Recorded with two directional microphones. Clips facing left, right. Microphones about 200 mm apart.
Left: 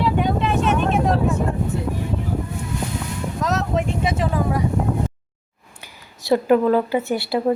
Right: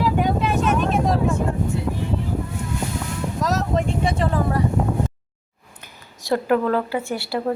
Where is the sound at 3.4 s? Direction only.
Centre (ahead or behind).